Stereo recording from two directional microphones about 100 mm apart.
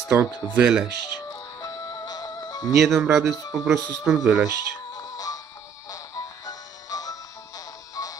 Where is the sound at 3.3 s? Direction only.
40° left (ahead or behind).